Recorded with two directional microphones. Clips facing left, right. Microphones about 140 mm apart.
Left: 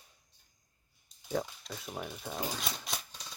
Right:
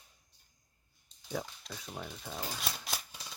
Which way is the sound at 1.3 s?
5° left (ahead or behind).